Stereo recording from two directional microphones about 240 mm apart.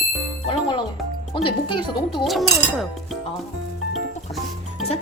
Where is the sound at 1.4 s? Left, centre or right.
Centre.